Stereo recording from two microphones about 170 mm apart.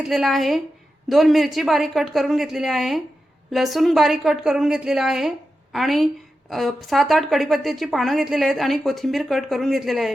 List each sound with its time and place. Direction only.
0.0 s a woman's voice: centre (ahead or behind)